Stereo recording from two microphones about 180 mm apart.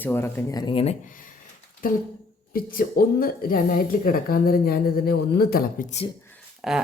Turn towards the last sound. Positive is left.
turn(degrees=0)  # may be behind; listen again after turning